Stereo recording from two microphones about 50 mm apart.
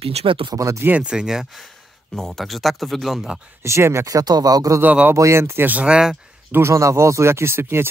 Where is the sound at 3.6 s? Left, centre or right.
Right.